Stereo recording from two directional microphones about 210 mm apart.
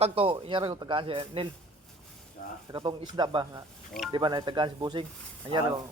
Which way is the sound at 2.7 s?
20° right (ahead or behind).